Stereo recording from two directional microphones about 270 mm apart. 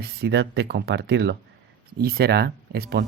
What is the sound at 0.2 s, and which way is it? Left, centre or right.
Speech, right.